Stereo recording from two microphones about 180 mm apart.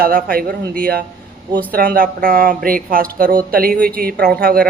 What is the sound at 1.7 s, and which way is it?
Speech, 55° right (ahead or behind).